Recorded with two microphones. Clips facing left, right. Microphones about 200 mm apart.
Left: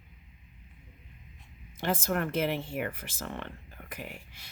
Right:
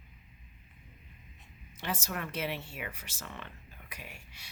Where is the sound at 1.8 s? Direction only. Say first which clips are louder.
Left 7 dB; 50° left (ahead or behind).